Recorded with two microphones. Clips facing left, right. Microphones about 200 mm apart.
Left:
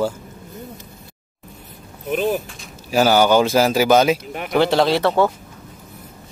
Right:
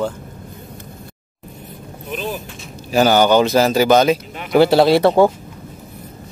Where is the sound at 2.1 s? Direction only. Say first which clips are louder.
Left 6 dB; 55° left (ahead or behind).